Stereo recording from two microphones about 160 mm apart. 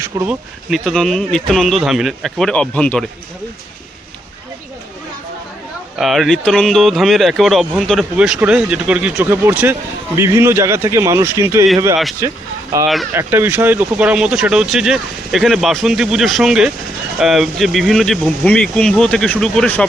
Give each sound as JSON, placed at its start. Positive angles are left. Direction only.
{"t": 0.0, "sound": "a man's voice", "side_deg": -15}
{"t": 0.7, "sound": "speech", "side_deg": 0}
{"t": 6.0, "sound": "a man's voice", "side_deg": 0}